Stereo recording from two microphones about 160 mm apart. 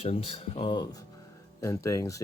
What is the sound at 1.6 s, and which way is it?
Speech, 20° left (ahead or behind).